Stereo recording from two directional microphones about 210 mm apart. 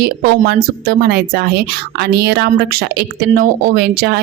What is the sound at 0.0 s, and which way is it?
A woman's voice, 50° right (ahead or behind).